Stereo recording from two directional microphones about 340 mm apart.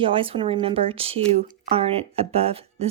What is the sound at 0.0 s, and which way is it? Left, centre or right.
Speech, centre.